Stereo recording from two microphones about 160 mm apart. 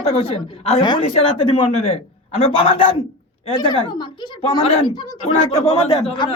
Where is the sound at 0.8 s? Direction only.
30° left (ahead or behind).